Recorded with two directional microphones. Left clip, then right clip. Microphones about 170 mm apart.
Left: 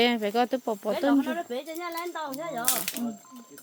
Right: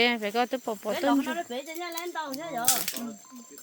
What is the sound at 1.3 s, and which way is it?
Speech, 40° left (ahead or behind).